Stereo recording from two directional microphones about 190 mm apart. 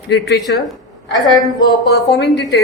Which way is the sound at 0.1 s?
65° left (ahead or behind).